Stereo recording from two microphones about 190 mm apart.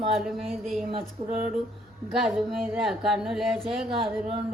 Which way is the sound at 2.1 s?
Centre (ahead or behind).